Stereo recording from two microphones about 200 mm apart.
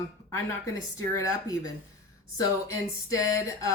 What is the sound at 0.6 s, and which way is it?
Speech, 15° left (ahead or behind).